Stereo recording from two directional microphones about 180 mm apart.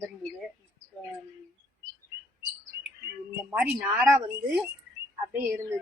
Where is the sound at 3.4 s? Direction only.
5° right (ahead or behind).